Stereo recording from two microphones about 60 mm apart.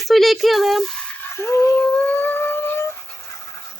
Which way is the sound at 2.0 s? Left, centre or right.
Left.